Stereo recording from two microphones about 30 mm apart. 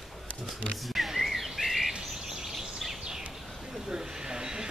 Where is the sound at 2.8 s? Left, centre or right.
Centre.